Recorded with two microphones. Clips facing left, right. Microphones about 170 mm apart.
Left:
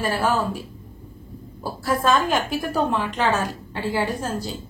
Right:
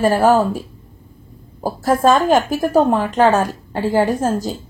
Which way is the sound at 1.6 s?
45° right (ahead or behind).